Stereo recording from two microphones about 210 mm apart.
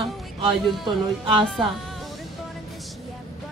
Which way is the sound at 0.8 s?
25° right (ahead or behind).